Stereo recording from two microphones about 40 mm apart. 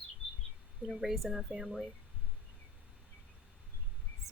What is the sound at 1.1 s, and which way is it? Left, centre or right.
Speech, centre.